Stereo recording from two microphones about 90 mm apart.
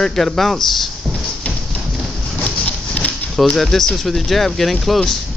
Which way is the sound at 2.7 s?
15° left (ahead or behind).